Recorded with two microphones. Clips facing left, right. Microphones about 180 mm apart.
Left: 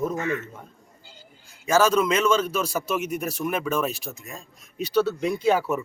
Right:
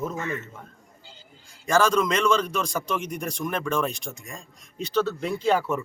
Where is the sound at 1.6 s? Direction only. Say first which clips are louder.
Left 1 dB; 5° left (ahead or behind).